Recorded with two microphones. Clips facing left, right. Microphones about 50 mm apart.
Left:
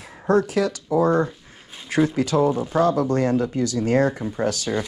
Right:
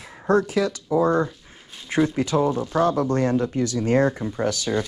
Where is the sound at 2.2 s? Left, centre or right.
Right.